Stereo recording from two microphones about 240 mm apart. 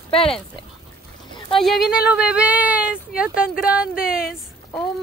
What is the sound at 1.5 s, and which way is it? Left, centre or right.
Speech, centre.